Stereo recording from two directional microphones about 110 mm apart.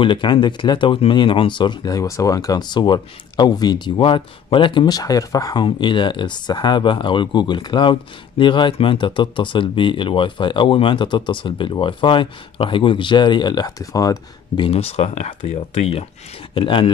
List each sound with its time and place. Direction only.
0.0 s speech: 45° left (ahead or behind)
14.6 s speech: 65° left (ahead or behind)
16.5 s speech: 55° left (ahead or behind)